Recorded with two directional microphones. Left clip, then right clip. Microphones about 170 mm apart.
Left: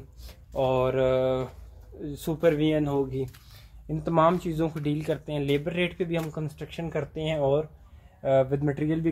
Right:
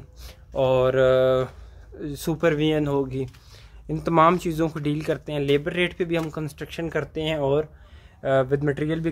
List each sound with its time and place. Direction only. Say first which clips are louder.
0.5 s speech: right 5 dB; 15° right (ahead or behind)